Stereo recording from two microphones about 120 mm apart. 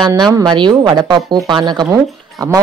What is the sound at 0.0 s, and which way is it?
A woman's voice, 35° right (ahead or behind).